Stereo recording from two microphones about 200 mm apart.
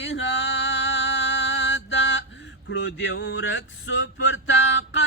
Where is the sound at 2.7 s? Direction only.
65° left (ahead or behind).